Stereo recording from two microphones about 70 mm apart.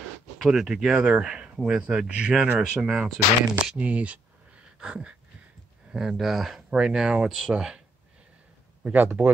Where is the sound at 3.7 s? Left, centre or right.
Centre.